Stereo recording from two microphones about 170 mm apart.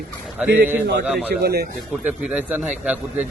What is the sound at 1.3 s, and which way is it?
Speech, 70° right (ahead or behind).